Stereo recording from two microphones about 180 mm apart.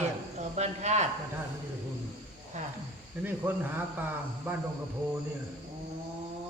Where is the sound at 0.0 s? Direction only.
40° right (ahead or behind).